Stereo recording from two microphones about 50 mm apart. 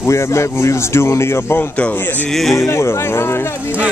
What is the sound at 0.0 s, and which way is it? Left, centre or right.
Speech, left.